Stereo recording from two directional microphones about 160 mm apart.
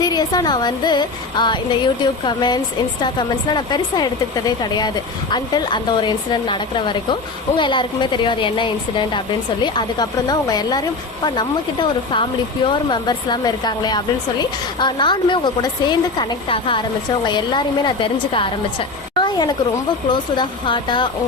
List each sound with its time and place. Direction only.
0.0 s speech: 25° left (ahead or behind)